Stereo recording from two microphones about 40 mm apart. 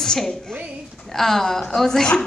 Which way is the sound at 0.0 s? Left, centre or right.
Centre.